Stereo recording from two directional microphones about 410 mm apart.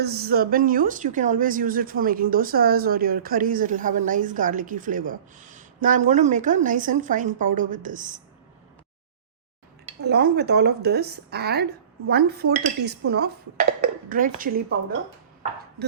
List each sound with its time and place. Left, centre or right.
0.0 s a woman's voice: right
10.0 s a woman's voice: right